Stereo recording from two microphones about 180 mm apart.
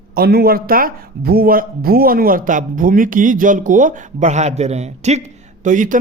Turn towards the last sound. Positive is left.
turn(degrees=-45)  # may be behind; listen again after turning